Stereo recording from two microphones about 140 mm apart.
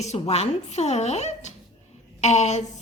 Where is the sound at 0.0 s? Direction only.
50° left (ahead or behind).